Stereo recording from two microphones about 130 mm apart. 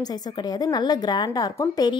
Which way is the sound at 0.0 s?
30° left (ahead or behind).